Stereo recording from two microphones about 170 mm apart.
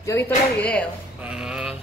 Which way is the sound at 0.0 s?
15° left (ahead or behind).